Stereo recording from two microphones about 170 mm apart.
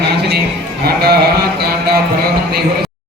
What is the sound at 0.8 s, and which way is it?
Sheep, 70° right (ahead or behind).